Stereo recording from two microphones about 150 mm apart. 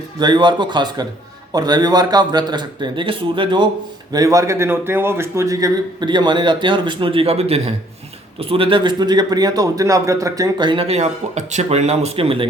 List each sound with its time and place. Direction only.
0.2 s speech: 30° right (ahead or behind)
4.1 s a man's voice: 20° right (ahead or behind); by 12.5 s 40° right (ahead or behind)